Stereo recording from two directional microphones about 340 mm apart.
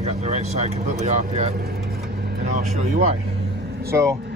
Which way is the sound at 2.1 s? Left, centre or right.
Right.